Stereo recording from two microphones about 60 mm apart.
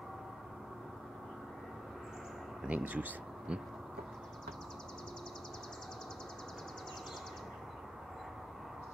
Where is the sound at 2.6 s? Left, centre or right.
Right.